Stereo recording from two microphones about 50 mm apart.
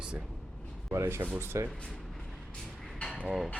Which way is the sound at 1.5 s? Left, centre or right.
Right.